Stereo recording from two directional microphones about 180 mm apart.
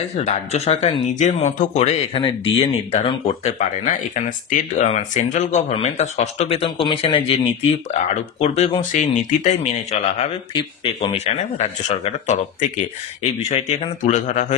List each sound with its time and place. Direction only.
0.1 s speech: 35° left (ahead or behind)